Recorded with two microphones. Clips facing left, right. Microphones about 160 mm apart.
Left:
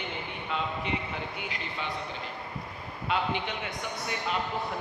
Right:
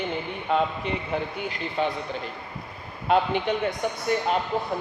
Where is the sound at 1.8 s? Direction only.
45° right (ahead or behind).